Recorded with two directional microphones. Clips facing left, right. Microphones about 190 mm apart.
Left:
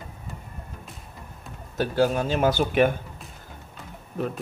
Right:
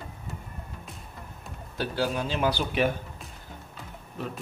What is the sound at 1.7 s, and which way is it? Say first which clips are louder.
Speech: left 6 dB; 45° left (ahead or behind).